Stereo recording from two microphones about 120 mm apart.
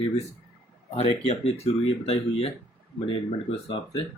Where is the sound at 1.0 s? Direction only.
60° left (ahead or behind).